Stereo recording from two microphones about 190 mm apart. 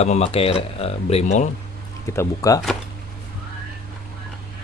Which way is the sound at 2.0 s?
15° left (ahead or behind).